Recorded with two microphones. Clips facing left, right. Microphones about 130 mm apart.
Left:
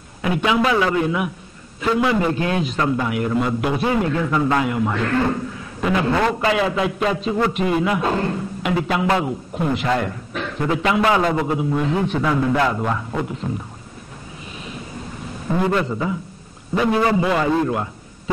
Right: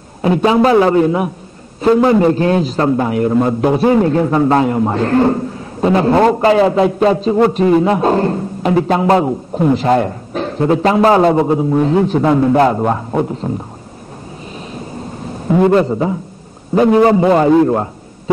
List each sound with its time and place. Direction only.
0.2 s a man's voice: 35° right (ahead or behind)
15.7 s a man's voice: 35° right (ahead or behind)